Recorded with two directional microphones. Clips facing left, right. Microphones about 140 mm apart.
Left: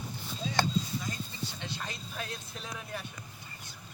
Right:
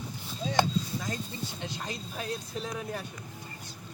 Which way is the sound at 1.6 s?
40° right (ahead or behind).